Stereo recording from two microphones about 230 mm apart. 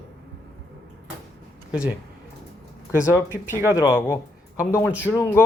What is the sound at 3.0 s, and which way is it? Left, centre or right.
Speech, centre.